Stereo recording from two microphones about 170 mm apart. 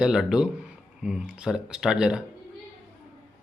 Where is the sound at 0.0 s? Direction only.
5° right (ahead or behind).